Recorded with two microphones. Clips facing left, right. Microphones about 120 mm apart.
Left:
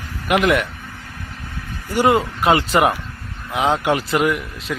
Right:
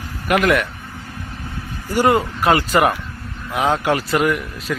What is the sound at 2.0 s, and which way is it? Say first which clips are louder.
A man's voice: even; 20° left (ahead or behind).